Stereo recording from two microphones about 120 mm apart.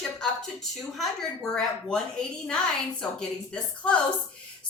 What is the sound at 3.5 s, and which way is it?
Speech, 10° left (ahead or behind).